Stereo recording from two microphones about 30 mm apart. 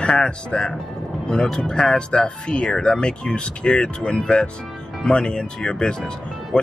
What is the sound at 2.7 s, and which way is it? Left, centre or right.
Speech, left.